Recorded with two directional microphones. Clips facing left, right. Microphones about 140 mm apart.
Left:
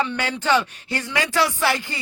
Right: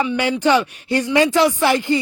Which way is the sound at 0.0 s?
10° right (ahead or behind).